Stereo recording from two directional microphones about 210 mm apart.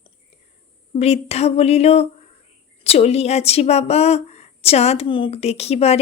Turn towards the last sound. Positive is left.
turn(degrees=30)  # may be behind; listen again after turning